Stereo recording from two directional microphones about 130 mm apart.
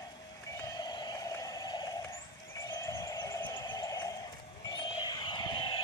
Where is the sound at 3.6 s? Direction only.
25° left (ahead or behind).